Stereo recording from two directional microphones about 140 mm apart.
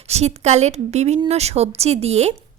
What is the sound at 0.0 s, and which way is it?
A woman's voice, 50° right (ahead or behind).